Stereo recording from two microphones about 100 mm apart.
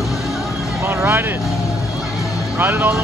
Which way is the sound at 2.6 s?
20° right (ahead or behind).